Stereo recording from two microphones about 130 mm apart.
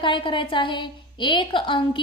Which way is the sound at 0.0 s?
40° left (ahead or behind).